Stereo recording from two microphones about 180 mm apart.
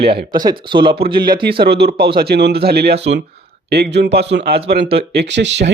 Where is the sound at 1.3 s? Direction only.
60° right (ahead or behind).